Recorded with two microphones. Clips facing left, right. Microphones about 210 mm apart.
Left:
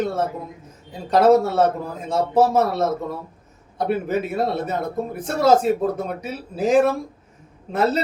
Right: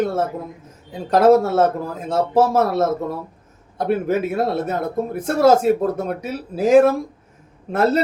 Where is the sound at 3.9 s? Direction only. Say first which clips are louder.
Right 4 dB; centre (ahead or behind).